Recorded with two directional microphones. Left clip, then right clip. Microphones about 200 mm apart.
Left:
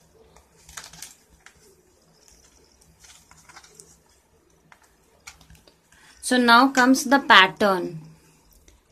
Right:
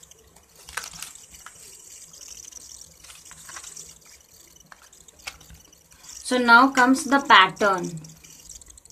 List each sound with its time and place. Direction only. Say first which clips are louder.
6.2 s speech: right 1 dB; 40° left (ahead or behind)